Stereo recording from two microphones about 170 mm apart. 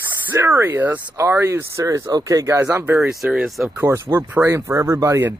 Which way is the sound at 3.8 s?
15° right (ahead or behind).